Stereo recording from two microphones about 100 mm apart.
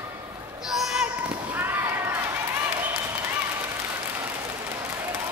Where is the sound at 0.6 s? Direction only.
5° right (ahead or behind); by 2.2 s 20° right (ahead or behind).